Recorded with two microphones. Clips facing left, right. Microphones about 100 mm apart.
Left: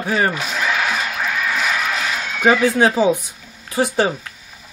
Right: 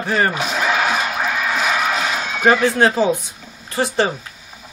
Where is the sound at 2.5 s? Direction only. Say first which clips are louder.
Even; 5° left (ahead or behind).